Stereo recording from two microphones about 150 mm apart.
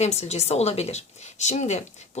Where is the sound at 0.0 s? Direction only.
45° left (ahead or behind).